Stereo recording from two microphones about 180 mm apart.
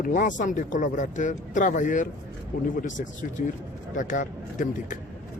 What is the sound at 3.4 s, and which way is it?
Speech, 50° left (ahead or behind).